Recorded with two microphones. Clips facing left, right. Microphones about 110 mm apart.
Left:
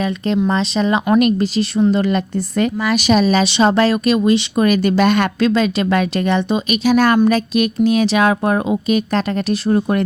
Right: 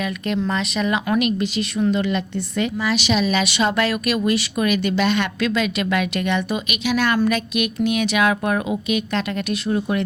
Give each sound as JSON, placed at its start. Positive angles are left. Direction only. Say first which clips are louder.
{"t": 0.4, "sound": "a woman's voice", "louder": "left 5 dB", "side_deg": 30}
{"t": 4.6, "sound": "speech", "louder": "left 5 dB", "side_deg": 40}
{"t": 5.4, "sound": "a woman's voice", "louder": "left 6 dB", "side_deg": 35}